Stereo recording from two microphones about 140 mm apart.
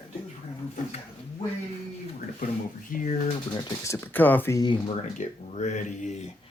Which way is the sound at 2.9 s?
65° left (ahead or behind).